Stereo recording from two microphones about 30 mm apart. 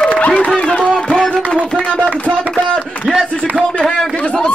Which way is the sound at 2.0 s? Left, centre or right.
Right.